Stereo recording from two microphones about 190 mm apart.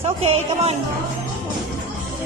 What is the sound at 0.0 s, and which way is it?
Speech, 35° right (ahead or behind).